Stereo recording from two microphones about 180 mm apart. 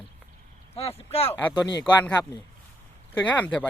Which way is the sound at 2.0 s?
15° left (ahead or behind).